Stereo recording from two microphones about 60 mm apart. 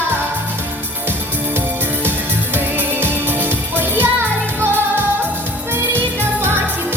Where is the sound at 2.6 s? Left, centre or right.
Right.